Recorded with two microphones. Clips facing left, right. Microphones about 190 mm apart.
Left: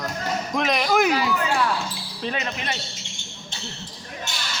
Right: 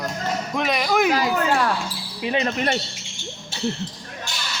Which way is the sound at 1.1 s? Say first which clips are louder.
Right 2 dB; 45° right (ahead or behind).